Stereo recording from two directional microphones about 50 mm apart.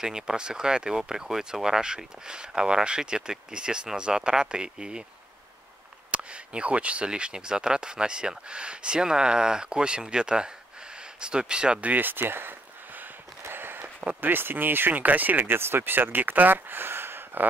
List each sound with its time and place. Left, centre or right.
0.0 s speech: centre
6.1 s speech: right
11.8 s a sound: right
14.2 s speech: right